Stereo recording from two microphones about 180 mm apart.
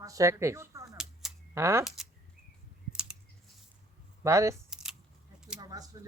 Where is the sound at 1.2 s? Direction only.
Centre (ahead or behind).